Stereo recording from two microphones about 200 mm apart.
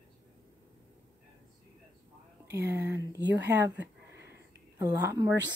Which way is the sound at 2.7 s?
15° right (ahead or behind).